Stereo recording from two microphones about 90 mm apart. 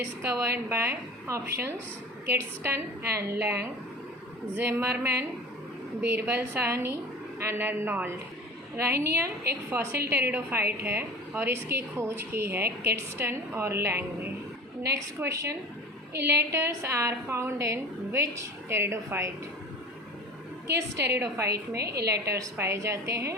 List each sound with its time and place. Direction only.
0.0 s a woman's voice: 30° right (ahead or behind)
4.5 s a woman's voice: 30° right (ahead or behind)
20.7 s a woman's voice: 35° right (ahead or behind)